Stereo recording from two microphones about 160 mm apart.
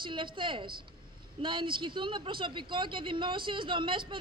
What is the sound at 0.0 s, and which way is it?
Speech, 30° right (ahead or behind).